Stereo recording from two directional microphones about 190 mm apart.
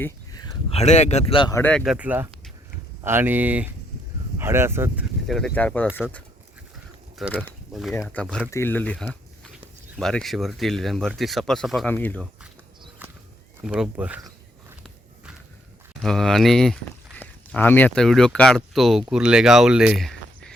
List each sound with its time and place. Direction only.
0.0 s a sound: 20° left (ahead or behind)
0.7 s speech: 35° left (ahead or behind)
1.5 s speech: 10° left (ahead or behind)
1.8 s speech: 5° right (ahead or behind)
5.3 s speech: 5° left (ahead or behind)
7.3 s speech: 5° left (ahead or behind)
13.0 s walk: 10° right (ahead or behind)
13.6 s speech: 5° right (ahead or behind)
16.0 s speech: centre (ahead or behind)